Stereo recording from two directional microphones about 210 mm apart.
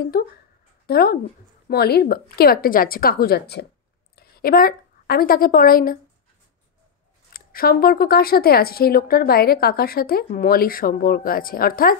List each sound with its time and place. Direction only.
0.1 s a woman's voice: 45° left (ahead or behind)
7.3 s speech: 45° left (ahead or behind)